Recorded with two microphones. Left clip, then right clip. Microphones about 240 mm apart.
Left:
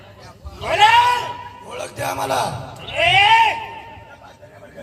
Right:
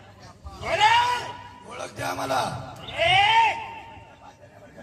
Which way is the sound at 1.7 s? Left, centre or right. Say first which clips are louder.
Left 5 dB; left.